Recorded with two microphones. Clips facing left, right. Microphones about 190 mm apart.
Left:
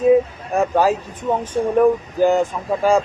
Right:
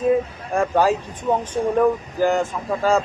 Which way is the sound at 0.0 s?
10° left (ahead or behind).